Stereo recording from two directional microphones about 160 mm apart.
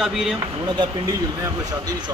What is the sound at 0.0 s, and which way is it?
Speech, centre (ahead or behind).